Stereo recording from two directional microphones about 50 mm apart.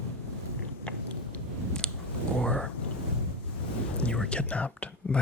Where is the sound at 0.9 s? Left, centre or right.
Left.